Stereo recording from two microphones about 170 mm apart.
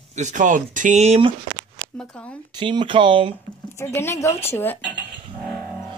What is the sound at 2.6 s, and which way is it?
Speech, 30° right (ahead or behind).